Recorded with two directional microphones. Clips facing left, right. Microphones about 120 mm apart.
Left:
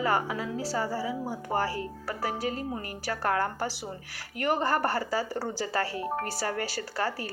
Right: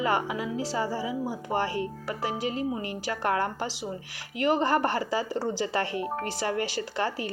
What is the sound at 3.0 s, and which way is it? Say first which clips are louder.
Speech: even; 15° right (ahead or behind).